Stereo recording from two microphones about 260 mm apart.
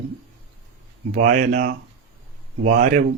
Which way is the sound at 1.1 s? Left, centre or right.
Right.